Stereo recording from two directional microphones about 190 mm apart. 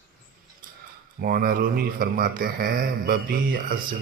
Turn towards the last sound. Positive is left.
turn(degrees=-50)  # may be behind; listen again after turning